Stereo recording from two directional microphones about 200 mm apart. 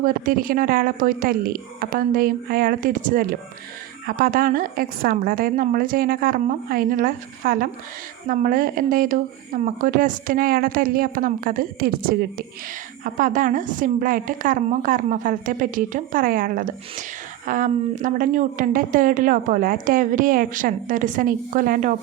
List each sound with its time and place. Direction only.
0.0 s a woman's voice: 45° right (ahead or behind)